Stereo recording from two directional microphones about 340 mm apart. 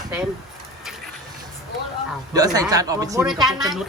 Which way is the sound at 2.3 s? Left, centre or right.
Centre.